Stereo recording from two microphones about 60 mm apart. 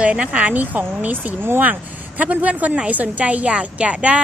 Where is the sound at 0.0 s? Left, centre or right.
Centre.